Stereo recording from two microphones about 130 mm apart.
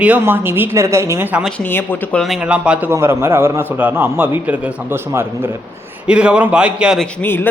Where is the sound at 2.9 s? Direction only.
20° right (ahead or behind).